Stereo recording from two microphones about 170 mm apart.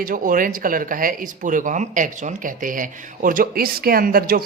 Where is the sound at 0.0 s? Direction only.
55° right (ahead or behind).